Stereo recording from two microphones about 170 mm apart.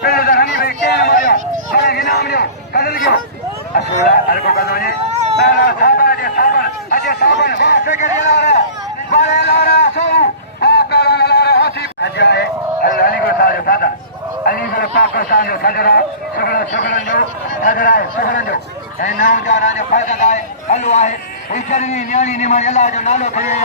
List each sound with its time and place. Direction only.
0.0 s a sound: 65° left (ahead or behind)
3.8 s speech: 70° left (ahead or behind); by 7.8 s 90° left
7.9 s a man's voice: 45° left (ahead or behind)
9.6 s a sound: 75° left (ahead or behind)
14.4 s a man's voice: 60° left (ahead or behind)
18.9 s a man's voice: 50° left (ahead or behind)